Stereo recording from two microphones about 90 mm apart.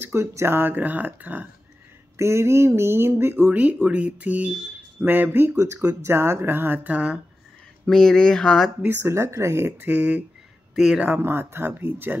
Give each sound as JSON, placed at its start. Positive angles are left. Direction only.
{"t": 0.0, "sound": "speech", "side_deg": -30}
{"t": 2.1, "sound": "speech", "side_deg": -30}
{"t": 3.5, "sound": "speech", "side_deg": -15}
{"t": 7.8, "sound": "speech", "side_deg": 5}
{"t": 8.8, "sound": "speech", "side_deg": -30}
{"t": 10.7, "sound": "a man's voice", "side_deg": -5}
{"t": 11.1, "sound": "speech", "side_deg": -25}